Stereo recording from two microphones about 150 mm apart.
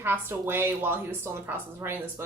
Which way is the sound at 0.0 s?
15° right (ahead or behind).